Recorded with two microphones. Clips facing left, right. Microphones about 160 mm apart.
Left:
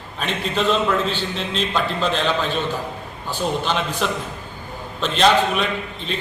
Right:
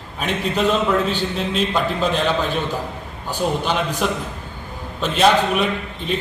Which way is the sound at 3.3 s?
10° right (ahead or behind).